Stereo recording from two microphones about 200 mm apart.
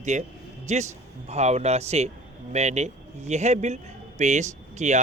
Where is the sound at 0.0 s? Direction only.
35° right (ahead or behind).